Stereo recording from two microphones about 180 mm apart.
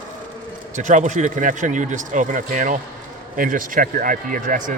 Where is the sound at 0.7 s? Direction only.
45° right (ahead or behind).